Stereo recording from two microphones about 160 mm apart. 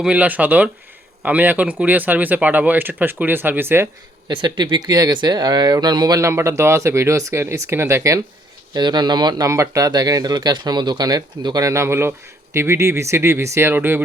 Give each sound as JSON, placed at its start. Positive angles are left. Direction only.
{"t": 0.0, "sound": "speech", "side_deg": -10}
{"t": 4.3, "sound": "speech", "side_deg": -30}